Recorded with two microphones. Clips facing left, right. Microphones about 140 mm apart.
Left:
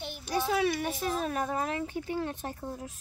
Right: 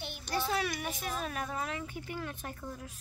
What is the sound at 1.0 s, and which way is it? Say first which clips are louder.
Speech: left 6 dB; 35° left (ahead or behind).